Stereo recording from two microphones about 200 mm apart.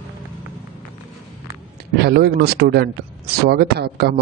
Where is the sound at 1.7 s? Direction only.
55° right (ahead or behind).